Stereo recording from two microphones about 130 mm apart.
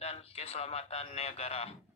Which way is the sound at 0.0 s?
50° left (ahead or behind).